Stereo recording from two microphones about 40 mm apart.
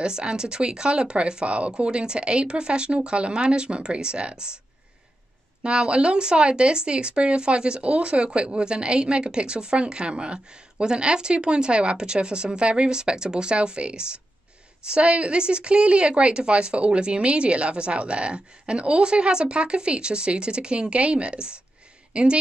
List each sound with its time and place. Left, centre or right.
0.0 s speech: right
5.6 s speech: right